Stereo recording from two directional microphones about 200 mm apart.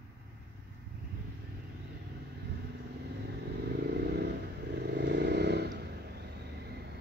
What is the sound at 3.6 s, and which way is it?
Vehicle, 55° right (ahead or behind).